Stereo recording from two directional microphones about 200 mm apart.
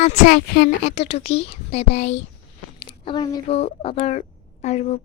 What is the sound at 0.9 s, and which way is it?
A woman's voice, 30° left (ahead or behind).